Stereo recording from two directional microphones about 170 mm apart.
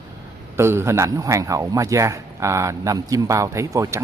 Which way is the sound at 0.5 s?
15° right (ahead or behind).